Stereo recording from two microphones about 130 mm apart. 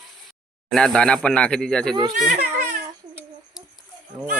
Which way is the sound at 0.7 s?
5° left (ahead or behind).